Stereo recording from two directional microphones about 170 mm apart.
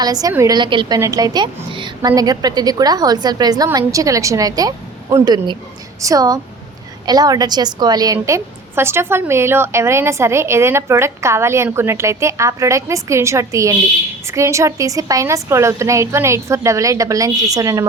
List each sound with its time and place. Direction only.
0.0 s a woman's voice: 20° right (ahead or behind)